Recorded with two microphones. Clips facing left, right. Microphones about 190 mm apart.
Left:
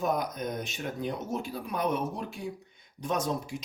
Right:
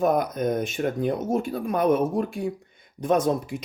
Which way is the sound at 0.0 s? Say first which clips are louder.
Right 8 dB; 55° right (ahead or behind).